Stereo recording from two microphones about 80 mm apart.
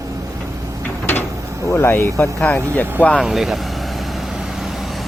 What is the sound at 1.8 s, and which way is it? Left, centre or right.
Speech, left.